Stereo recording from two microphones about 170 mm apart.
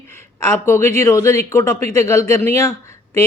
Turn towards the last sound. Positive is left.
turn(degrees=15)  # may be behind; listen again after turning